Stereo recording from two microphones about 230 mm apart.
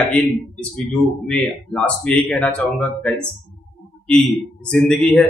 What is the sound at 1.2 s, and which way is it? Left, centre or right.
A man's voice, centre.